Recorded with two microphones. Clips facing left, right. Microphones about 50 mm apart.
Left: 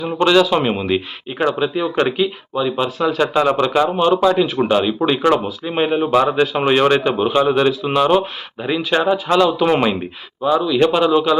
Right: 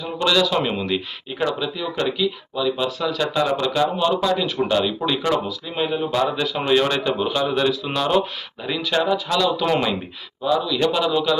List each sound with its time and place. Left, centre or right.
0.3 s speech: left